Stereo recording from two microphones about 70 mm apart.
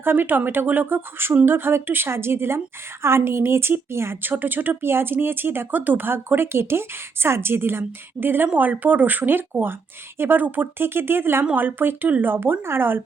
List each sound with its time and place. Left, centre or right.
0.0 s speech: right